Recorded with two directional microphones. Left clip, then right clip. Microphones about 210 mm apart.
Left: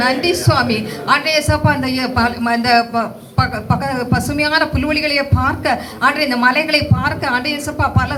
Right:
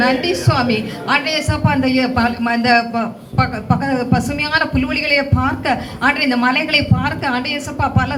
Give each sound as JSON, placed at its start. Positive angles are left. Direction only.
{"t": 0.0, "sound": "a woman's voice", "side_deg": 50}